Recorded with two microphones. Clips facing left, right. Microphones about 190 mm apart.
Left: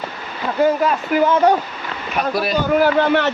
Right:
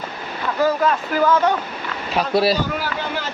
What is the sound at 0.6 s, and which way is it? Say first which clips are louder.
Speech: left 2 dB; 20° left (ahead or behind).